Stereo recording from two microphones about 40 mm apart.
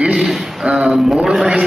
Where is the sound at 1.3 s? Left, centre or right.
Centre.